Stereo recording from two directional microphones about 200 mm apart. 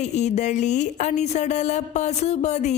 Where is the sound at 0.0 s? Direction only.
35° left (ahead or behind).